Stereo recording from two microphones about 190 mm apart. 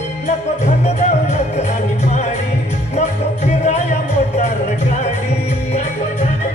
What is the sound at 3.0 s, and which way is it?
Music, 35° left (ahead or behind).